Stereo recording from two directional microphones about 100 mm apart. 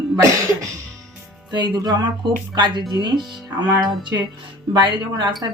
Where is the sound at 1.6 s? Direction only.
45° right (ahead or behind).